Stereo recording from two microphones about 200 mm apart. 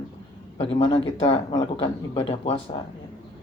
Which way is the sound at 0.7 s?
30° left (ahead or behind).